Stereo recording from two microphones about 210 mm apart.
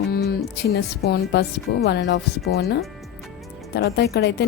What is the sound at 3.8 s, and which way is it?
Speech, 50° left (ahead or behind).